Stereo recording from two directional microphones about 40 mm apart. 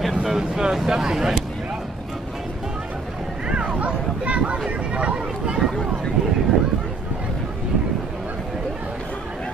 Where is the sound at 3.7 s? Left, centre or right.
Right.